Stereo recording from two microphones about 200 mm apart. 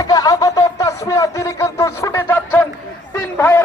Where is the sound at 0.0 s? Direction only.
20° left (ahead or behind).